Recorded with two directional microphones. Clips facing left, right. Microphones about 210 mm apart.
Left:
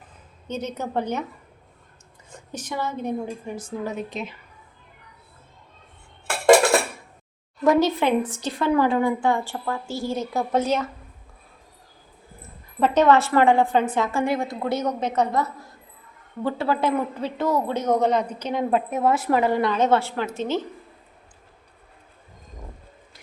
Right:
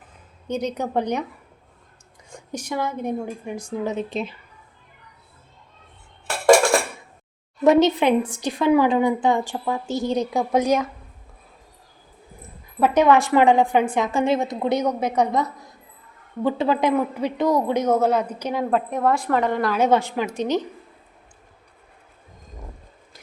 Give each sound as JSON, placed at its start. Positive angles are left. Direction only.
{"t": 0.4, "sound": "a woman's voice", "side_deg": -15}
{"t": 2.3, "sound": "a woman's voice", "side_deg": -10}
{"t": 3.9, "sound": "a woman's voice", "side_deg": -30}
{"t": 6.4, "sound": "dishes", "side_deg": 20}
{"t": 7.6, "sound": "a woman's voice", "side_deg": -20}
{"t": 12.8, "sound": "a woman's voice", "side_deg": -10}
{"t": 18.7, "sound": "a woman's voice", "side_deg": 5}
{"t": 19.7, "sound": "a woman's voice", "side_deg": -10}